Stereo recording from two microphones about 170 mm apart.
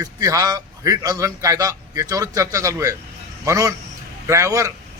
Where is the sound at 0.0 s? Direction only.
20° right (ahead or behind).